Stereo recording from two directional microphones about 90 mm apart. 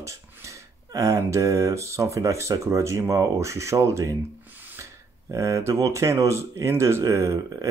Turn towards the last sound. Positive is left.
turn(degrees=-35)  # may be behind; listen again after turning